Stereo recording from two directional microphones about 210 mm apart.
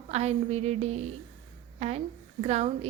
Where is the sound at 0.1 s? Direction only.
30° right (ahead or behind).